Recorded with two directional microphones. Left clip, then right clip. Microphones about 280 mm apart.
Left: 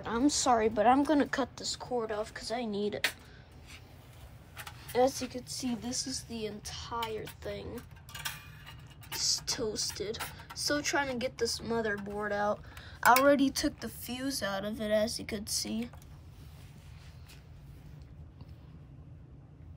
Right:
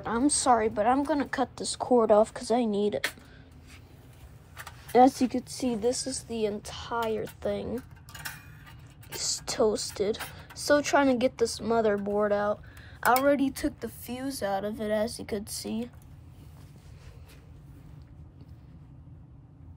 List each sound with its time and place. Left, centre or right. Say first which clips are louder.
0.0 s speech: right 3 dB; centre
5.0 s a woman's voice: right 7 dB; right; by 8.7 s centre
9.2 s speech: right 6 dB; centre
14.6 s speech: right 2 dB; right
15.0 s speech: right 3 dB; centre